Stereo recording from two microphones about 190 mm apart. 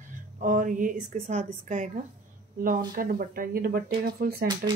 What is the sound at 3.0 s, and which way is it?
Speech, 50° right (ahead or behind).